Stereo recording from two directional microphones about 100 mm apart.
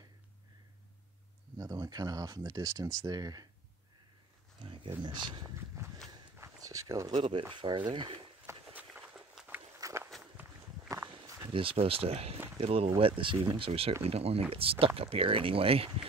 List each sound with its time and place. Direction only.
1.6 s speech: 40° right (ahead or behind)
4.6 s a sound: 55° right (ahead or behind)
5.0 s speech: 50° right (ahead or behind)
6.6 s a sound: 35° right (ahead or behind)
7.2 s speech: 65° right (ahead or behind)
7.4 s speech: 50° right (ahead or behind)
8.7 s walk: 10° right (ahead or behind)
9.8 s walk: 35° right (ahead or behind)
11.2 s a sound: 30° right (ahead or behind)
11.5 s speech: 70° right (ahead or behind)
12.9 s speech: 60° right (ahead or behind)
13.5 s speech: 70° right (ahead or behind)
14.0 s speech: 90° right
14.5 s speech: 70° right (ahead or behind)